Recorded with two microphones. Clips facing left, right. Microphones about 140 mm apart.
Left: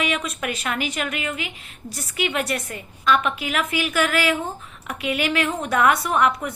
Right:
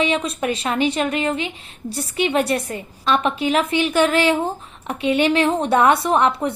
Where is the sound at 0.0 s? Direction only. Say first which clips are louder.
Right 5 dB; 30° right (ahead or behind).